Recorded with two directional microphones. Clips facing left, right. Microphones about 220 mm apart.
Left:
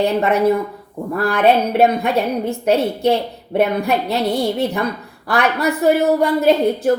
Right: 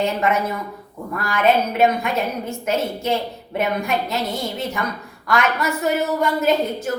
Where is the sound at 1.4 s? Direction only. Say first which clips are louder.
Left 3 dB; 35° left (ahead or behind).